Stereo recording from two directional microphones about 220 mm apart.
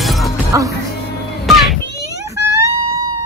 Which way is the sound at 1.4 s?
Centre (ahead or behind).